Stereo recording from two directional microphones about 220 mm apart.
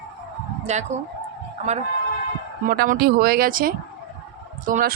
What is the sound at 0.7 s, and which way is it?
Speech, 30° right (ahead or behind).